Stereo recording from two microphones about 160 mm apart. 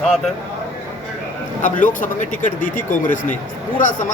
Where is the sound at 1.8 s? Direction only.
55° left (ahead or behind).